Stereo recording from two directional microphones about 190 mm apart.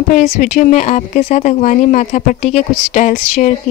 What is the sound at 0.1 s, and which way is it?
Speech, 40° left (ahead or behind).